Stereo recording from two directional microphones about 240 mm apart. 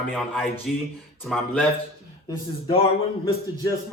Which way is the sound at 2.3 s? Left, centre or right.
Left.